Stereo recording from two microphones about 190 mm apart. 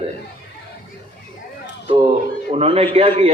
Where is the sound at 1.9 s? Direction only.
30° right (ahead or behind).